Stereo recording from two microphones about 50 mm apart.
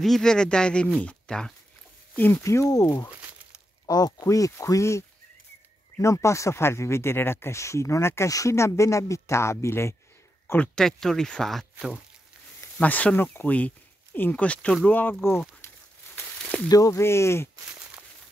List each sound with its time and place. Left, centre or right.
0.0 s speech: centre
2.1 s speech: left
2.4 s speech: left
6.6 s speech: left
7.5 s speech: left
10.4 s speech: left
10.7 s speech: centre
12.7 s speech: left
14.3 s speech: left
14.9 s speech: left
16.9 s speech: left